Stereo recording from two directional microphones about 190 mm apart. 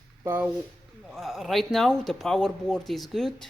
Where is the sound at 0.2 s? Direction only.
10° right (ahead or behind).